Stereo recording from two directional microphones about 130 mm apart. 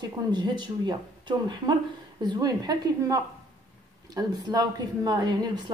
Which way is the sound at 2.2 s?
30° right (ahead or behind).